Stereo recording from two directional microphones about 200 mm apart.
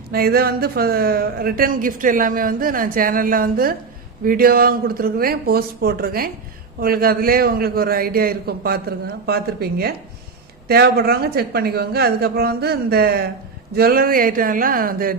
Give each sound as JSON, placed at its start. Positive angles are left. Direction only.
{"t": 0.1, "sound": "speech", "side_deg": -50}